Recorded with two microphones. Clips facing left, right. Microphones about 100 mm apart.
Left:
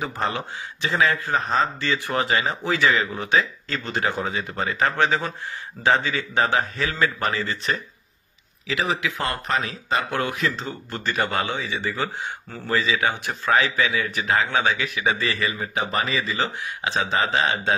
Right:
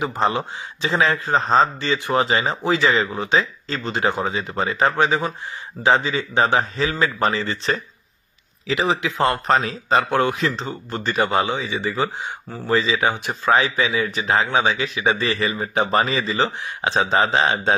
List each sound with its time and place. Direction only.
0.0 s a man's voice: 20° right (ahead or behind)